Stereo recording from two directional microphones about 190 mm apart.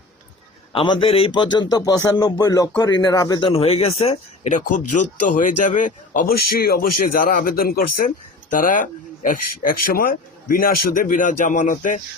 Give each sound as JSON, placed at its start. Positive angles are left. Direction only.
{"t": 0.7, "sound": "a man's voice", "side_deg": 25}